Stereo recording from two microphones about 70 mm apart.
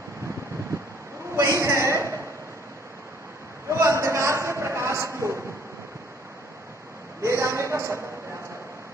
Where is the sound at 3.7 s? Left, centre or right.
Right.